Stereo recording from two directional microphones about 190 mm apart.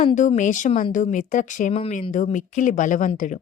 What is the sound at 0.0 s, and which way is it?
A woman's voice, 40° left (ahead or behind).